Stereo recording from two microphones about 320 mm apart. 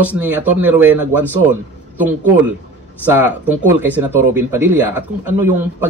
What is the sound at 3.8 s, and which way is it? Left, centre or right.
Speech, centre.